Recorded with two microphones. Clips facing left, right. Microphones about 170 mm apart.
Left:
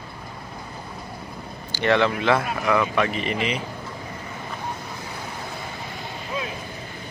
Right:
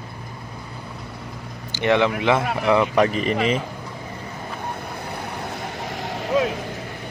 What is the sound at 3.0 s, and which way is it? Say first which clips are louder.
Speech: right 5 dB; 40° right (ahead or behind).